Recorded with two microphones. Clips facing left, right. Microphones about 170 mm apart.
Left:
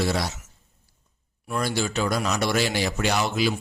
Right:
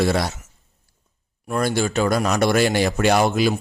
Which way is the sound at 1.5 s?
50° right (ahead or behind).